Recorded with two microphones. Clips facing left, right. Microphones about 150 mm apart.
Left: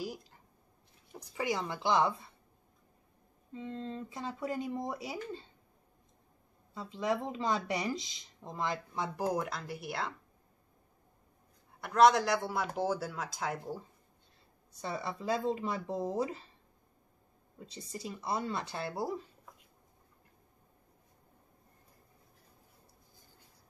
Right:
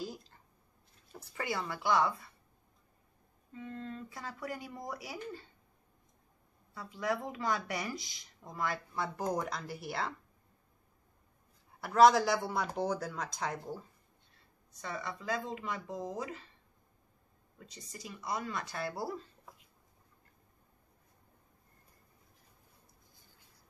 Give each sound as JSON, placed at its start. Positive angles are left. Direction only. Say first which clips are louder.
{"t": 0.0, "sound": "a sound", "louder": "left 2 dB", "side_deg": 10}
{"t": 1.0, "sound": "speech", "louder": "left 4 dB", "side_deg": 15}
{"t": 3.5, "sound": "speech", "louder": "left 3 dB", "side_deg": 25}
{"t": 6.7, "sound": "speech", "louder": "left 2 dB", "side_deg": 25}
{"t": 11.8, "sound": "speech", "louder": "right 1 dB", "side_deg": 0}
{"t": 14.7, "sound": "speech", "louder": "left 3 dB", "side_deg": 30}
{"t": 17.6, "sound": "speech", "louder": "left 6 dB", "side_deg": 30}